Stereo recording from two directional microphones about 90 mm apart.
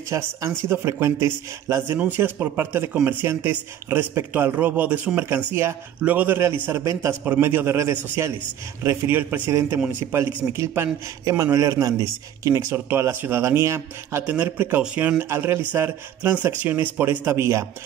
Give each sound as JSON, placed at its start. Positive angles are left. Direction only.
{"t": 0.1, "sound": "a man's voice", "side_deg": -35}
{"t": 6.8, "sound": "a man's voice", "side_deg": -35}
{"t": 7.2, "sound": "a man's voice", "side_deg": -25}
{"t": 14.2, "sound": "a man's voice", "side_deg": -20}
{"t": 15.1, "sound": "a man's voice", "side_deg": -30}